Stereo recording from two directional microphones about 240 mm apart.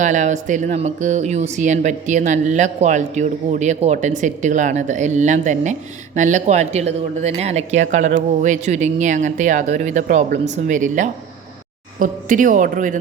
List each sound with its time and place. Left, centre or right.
0.0 s speech: right